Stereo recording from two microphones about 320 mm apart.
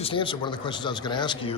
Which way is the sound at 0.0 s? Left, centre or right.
Centre.